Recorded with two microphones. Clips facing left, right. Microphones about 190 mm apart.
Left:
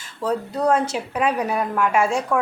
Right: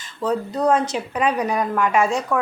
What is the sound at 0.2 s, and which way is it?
A woman's voice, 5° left (ahead or behind).